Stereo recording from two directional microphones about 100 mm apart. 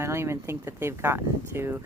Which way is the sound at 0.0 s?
25° right (ahead or behind).